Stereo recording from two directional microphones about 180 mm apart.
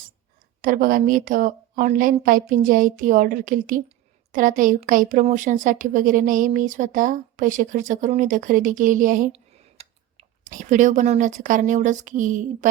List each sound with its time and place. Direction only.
0.6 s a woman's voice: 50° right (ahead or behind)
9.3 s speech: 35° right (ahead or behind)